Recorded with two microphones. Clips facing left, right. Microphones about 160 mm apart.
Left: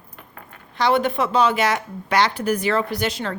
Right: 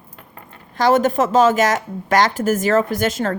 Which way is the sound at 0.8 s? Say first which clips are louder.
Right 4 dB; 45° right (ahead or behind).